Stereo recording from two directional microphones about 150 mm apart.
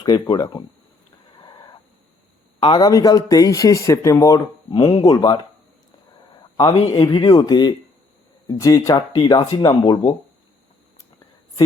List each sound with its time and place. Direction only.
0.0 s speech: 25° left (ahead or behind)
1.4 s a sound: 30° left (ahead or behind)
2.7 s speech: 25° left (ahead or behind)
6.8 s speech: 30° left (ahead or behind)